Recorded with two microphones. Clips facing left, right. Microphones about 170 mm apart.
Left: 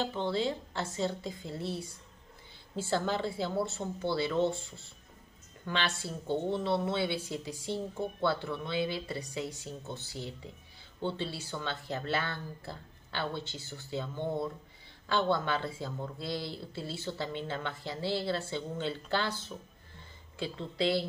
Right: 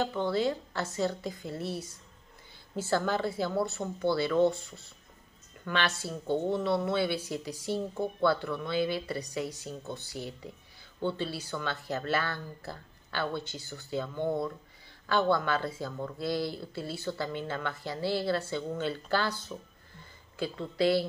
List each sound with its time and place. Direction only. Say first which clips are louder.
0.0 s speech: right 3 dB; 25° left (ahead or behind)
2.9 s speech: right 2 dB; 25° left (ahead or behind)